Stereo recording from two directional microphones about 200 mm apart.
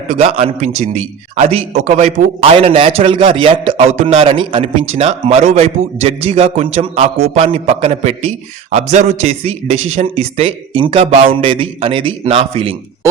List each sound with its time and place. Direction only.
0.1 s a man's voice: 30° right (ahead or behind)